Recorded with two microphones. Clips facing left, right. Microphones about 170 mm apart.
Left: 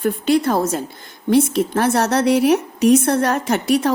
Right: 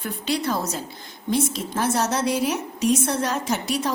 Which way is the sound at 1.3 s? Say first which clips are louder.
Left 9 dB; 65° left (ahead or behind).